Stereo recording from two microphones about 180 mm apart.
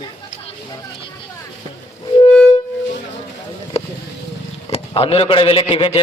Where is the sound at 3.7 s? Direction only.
35° left (ahead or behind).